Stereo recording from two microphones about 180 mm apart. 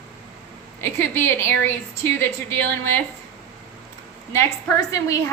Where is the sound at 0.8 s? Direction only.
15° left (ahead or behind).